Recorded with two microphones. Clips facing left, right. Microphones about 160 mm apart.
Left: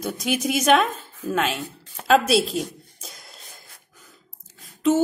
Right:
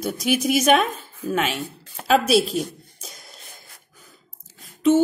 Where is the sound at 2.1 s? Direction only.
Centre (ahead or behind).